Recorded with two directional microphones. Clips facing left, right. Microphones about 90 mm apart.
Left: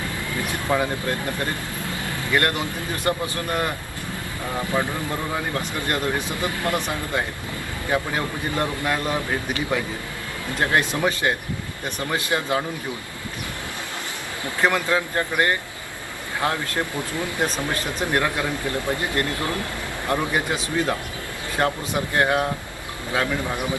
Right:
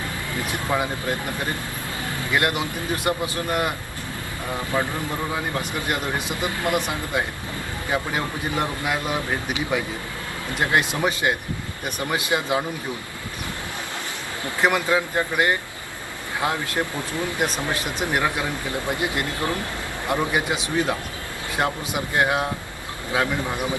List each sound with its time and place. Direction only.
0.5 s speech: 15° right (ahead or behind)
2.3 s speech: 15° right (ahead or behind)
5.5 s speech: 15° right (ahead or behind)
14.6 s speech: 15° right (ahead or behind)